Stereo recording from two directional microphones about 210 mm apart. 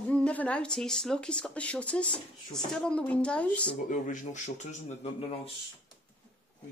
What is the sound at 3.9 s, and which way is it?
Speech, 35° left (ahead or behind).